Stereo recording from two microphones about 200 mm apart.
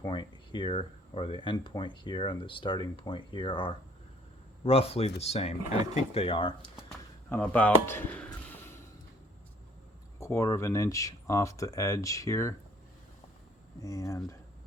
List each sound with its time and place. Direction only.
0.0 s speech: 25° left (ahead or behind)
7.3 s a sound: 10° left (ahead or behind)
10.2 s speech: 15° left (ahead or behind)
13.8 s speech: 15° left (ahead or behind)